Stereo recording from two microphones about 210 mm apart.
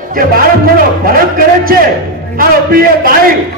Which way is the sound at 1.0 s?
45° right (ahead or behind).